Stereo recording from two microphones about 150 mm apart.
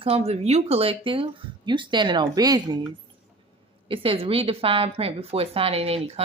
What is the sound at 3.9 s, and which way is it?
Speech, 35° right (ahead or behind).